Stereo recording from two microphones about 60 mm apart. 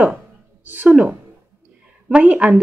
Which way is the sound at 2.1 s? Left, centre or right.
Right.